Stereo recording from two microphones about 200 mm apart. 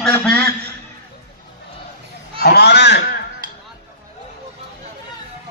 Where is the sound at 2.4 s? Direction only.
55° left (ahead or behind).